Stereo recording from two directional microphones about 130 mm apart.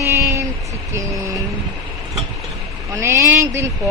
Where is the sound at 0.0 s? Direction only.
20° right (ahead or behind).